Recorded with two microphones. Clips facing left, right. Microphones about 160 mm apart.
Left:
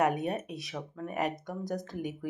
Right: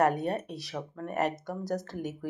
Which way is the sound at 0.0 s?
Centre (ahead or behind).